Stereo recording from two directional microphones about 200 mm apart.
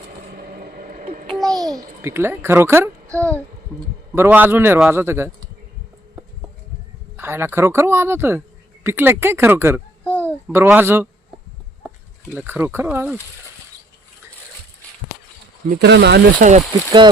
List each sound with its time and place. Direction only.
0.3 s a sound: 45° right (ahead or behind)
1.5 s a child's voice: 20° right (ahead or behind)
3.1 s speech: 5° left (ahead or behind)
4.1 s a man's voice: 10° right (ahead or behind)
7.2 s a man's voice: 10° right (ahead or behind)
10.0 s babbling: 5° left (ahead or behind)
10.5 s a man's voice: 10° right (ahead or behind)
12.3 s a man's voice: 10° right (ahead or behind)
15.7 s speech: 55° right (ahead or behind)
16.4 s speech: 40° right (ahead or behind)